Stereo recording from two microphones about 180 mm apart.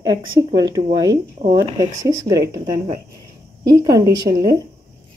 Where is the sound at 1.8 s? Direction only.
20° right (ahead or behind).